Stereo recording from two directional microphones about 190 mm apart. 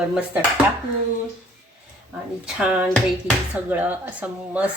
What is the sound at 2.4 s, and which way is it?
Speech, 5° right (ahead or behind).